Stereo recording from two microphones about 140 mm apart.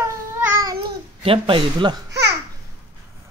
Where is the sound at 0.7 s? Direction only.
40° right (ahead or behind).